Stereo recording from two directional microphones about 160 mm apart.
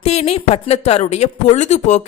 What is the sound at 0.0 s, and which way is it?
A man's voice, 40° left (ahead or behind).